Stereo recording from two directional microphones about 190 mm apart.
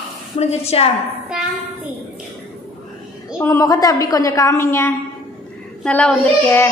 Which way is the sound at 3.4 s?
15° left (ahead or behind).